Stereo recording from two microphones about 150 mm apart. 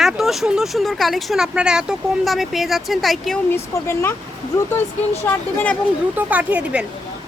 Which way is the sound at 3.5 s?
15° left (ahead or behind).